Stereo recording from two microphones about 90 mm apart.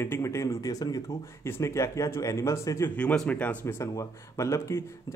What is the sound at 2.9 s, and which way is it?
Speech, 15° left (ahead or behind).